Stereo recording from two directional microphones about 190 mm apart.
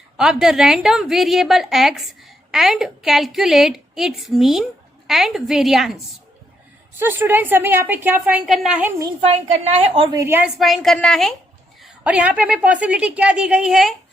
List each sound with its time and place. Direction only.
0.2 s a woman's voice: 5° right (ahead or behind)
7.0 s a woman's voice: 10° right (ahead or behind)
9.2 s a woman's voice: 35° right (ahead or behind); by 10.5 s 10° right (ahead or behind)
10.6 s a woman's voice: centre (ahead or behind)